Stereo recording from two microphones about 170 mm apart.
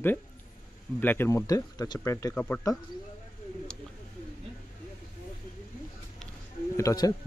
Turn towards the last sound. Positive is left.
turn(degrees=20)  # may be behind; listen again after turning